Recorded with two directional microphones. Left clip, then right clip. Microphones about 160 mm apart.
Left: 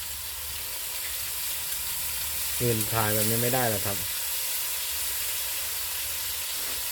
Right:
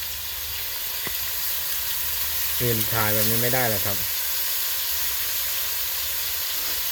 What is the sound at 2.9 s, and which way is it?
Speech, centre (ahead or behind).